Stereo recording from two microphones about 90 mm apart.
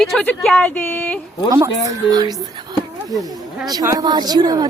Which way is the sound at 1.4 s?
35° right (ahead or behind).